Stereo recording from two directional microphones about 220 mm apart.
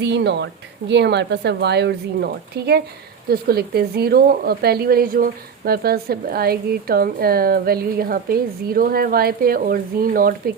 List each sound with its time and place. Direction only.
0.0 s a woman's voice: 50° right (ahead or behind)